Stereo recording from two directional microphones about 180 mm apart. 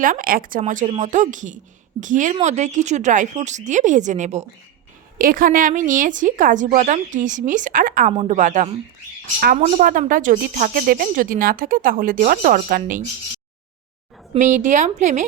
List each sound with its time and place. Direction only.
0.0 s a woman's voice: 50° right (ahead or behind)
5.1 s speech: 50° right (ahead or behind)
8.1 s a woman's voice: 30° right (ahead or behind)
8.4 s speech: 45° right (ahead or behind)
14.3 s speech: 45° right (ahead or behind)